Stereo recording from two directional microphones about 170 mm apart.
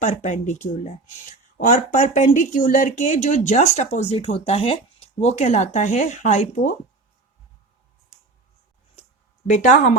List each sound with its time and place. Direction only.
0.0 s speech: 45° left (ahead or behind)
9.5 s speech: 45° left (ahead or behind)